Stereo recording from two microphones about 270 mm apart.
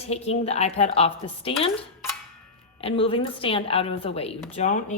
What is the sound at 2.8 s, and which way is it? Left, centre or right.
A woman's voice, left.